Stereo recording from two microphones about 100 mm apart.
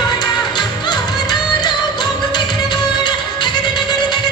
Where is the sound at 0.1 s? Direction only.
45° left (ahead or behind).